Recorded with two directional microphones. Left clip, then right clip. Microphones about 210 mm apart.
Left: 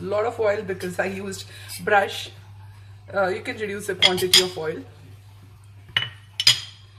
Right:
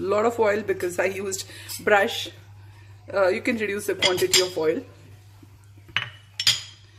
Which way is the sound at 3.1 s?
45° right (ahead or behind).